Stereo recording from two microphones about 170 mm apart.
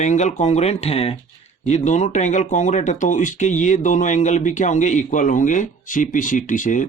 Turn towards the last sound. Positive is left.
turn(degrees=50)  # may be behind; listen again after turning